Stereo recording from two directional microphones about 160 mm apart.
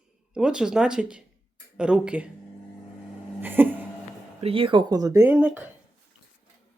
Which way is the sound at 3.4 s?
10° right (ahead or behind).